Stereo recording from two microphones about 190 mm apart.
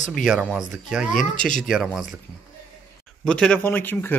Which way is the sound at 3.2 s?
5° left (ahead or behind).